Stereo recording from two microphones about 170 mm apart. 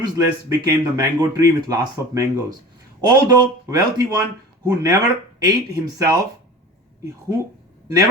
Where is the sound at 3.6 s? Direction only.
20° right (ahead or behind).